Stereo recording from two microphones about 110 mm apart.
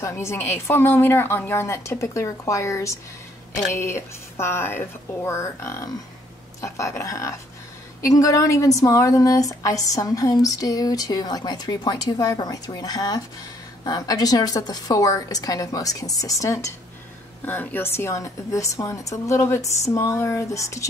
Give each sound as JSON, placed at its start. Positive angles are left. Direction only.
{"t": 0.0, "sound": "a woman's voice", "side_deg": 25}
{"t": 17.5, "sound": "a woman's voice", "side_deg": 20}